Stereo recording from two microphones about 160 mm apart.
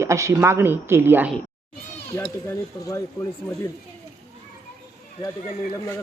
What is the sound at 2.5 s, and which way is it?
Speech, 15° left (ahead or behind).